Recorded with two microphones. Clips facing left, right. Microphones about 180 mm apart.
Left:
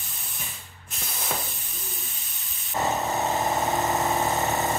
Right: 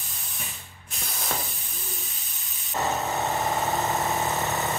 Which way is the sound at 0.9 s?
Centre (ahead or behind).